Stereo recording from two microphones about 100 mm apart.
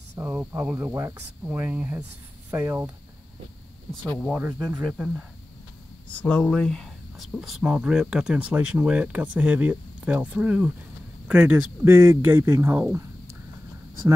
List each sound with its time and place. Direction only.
0.1 s speech: 20° right (ahead or behind)
4.4 s speech: 15° right (ahead or behind)
6.2 s speech: 10° left (ahead or behind); by 12.5 s 20° right (ahead or behind)